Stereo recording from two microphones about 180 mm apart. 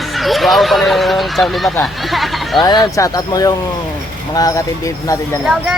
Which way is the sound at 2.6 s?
25° left (ahead or behind).